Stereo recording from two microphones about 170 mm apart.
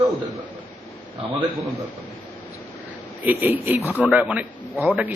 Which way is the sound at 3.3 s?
10° right (ahead or behind).